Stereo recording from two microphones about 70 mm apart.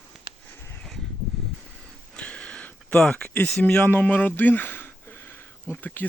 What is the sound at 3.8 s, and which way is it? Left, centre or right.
Speech, left.